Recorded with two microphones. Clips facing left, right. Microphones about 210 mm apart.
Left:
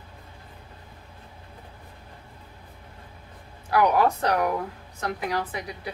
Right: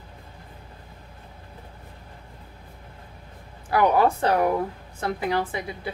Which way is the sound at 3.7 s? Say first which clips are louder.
Right 1 dB; 25° right (ahead or behind).